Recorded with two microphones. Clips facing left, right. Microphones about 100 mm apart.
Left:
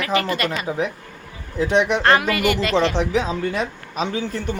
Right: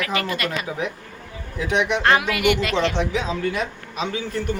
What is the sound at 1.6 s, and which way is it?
Speech, 35° left (ahead or behind).